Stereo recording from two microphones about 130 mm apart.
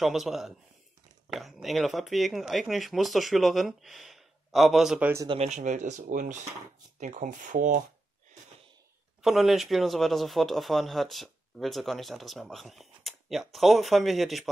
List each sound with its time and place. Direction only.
0.0 s speech: centre (ahead or behind)
5.0 s speech: 20° right (ahead or behind)
5.4 s speech: 65° right (ahead or behind); by 6.3 s 90° right
7.0 s speech: 75° right (ahead or behind)
9.2 s speech: centre (ahead or behind)